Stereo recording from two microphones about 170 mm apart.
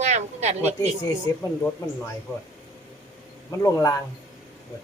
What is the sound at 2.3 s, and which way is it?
Speech, 15° left (ahead or behind).